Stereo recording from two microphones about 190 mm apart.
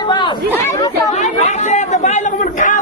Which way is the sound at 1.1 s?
40° left (ahead or behind).